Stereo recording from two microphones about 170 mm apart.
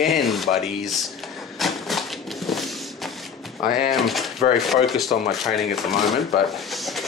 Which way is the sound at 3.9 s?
Centre (ahead or behind).